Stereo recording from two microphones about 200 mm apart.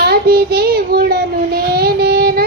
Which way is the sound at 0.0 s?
50° right (ahead or behind).